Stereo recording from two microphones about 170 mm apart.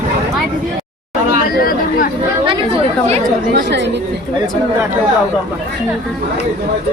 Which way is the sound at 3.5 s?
90° right.